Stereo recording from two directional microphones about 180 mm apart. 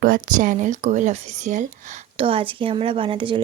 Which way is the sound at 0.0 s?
50° right (ahead or behind).